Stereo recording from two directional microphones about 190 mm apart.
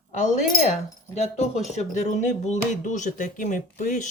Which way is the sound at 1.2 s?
35° left (ahead or behind).